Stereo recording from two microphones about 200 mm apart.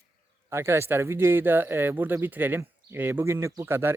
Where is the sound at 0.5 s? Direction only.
10° right (ahead or behind).